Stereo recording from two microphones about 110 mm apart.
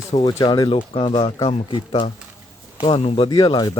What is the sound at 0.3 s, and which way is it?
Speech, 35° left (ahead or behind).